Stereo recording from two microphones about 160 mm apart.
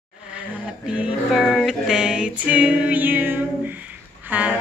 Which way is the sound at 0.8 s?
5° right (ahead or behind).